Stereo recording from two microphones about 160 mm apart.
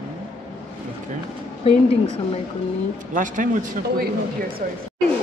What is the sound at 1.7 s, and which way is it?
Speech, 40° left (ahead or behind).